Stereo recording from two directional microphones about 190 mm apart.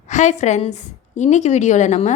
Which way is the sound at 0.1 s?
40° left (ahead or behind).